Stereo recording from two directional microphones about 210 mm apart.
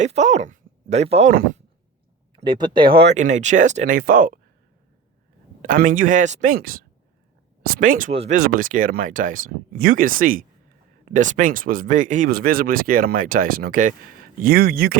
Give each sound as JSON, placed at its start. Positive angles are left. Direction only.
{"t": 0.0, "sound": "speech", "side_deg": -35}
{"t": 1.3, "sound": "speech", "side_deg": -45}
{"t": 2.3, "sound": "speech", "side_deg": -25}
{"t": 3.2, "sound": "speech", "side_deg": -35}
{"t": 5.6, "sound": "speech", "side_deg": -40}
{"t": 8.1, "sound": "speech", "side_deg": -30}
{"t": 8.4, "sound": "speech", "side_deg": -40}